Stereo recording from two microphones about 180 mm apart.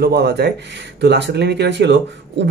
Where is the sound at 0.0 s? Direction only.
65° right (ahead or behind).